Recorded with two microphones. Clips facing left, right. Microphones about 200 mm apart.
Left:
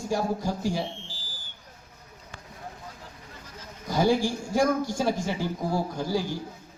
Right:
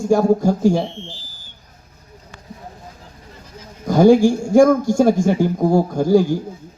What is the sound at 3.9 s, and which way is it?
A woman's voice, 50° right (ahead or behind).